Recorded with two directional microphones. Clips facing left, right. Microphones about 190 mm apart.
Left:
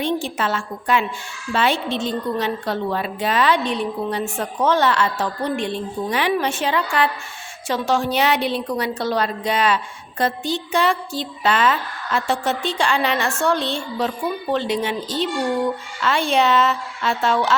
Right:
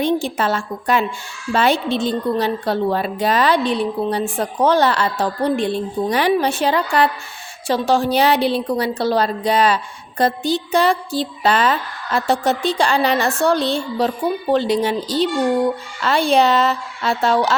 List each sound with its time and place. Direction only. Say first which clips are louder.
0.0 s a woman's voice: right 4 dB; 40° right (ahead or behind)